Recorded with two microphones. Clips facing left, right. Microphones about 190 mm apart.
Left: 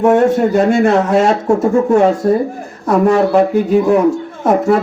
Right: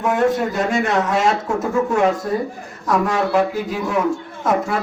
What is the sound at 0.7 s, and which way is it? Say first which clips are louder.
Speech: left 7 dB; 35° left (ahead or behind).